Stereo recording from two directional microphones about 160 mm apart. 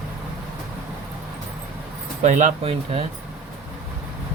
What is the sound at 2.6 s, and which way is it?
Speech, 40° right (ahead or behind).